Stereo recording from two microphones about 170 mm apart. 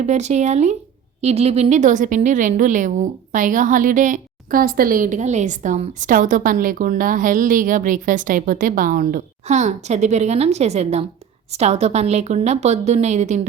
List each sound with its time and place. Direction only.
0.0 s a woman's voice: 40° right (ahead or behind)